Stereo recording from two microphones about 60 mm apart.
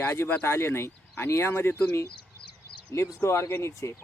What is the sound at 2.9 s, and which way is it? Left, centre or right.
Speech, left.